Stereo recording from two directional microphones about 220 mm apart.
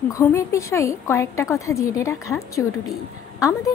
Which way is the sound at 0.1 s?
15° left (ahead or behind).